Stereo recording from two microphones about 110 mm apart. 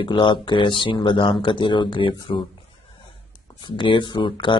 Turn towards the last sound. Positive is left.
turn(degrees=45)  # may be behind; listen again after turning